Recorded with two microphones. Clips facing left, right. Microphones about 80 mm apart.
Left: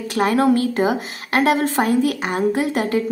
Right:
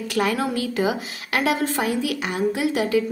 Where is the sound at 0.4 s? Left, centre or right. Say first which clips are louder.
Left 7 dB; left.